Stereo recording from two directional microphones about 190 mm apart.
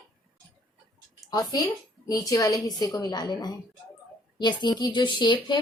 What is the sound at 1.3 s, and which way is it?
A woman's voice, 20° left (ahead or behind).